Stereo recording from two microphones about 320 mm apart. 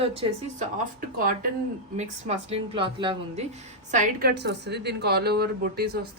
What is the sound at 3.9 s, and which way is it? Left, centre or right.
A woman's voice, right.